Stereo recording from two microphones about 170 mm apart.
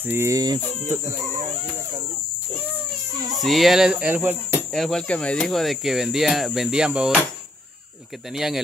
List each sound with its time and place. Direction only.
0.0 s speech: 15° right (ahead or behind)
3.3 s speech: centre (ahead or behind)
4.7 s speech: centre (ahead or behind)
8.4 s speech: centre (ahead or behind)